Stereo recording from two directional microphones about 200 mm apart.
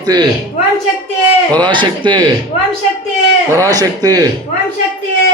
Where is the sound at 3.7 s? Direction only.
20° right (ahead or behind).